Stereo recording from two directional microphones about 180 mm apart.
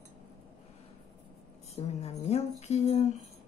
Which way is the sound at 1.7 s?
35° left (ahead or behind).